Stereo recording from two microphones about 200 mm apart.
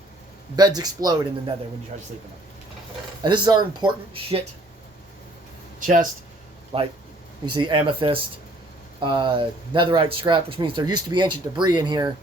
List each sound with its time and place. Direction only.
0.5 s speech: 20° right (ahead or behind)
1.9 s speech: 35° right (ahead or behind)
3.2 s speech: 20° right (ahead or behind)
5.8 s speech: 40° right (ahead or behind)
6.7 s speech: 30° right (ahead or behind)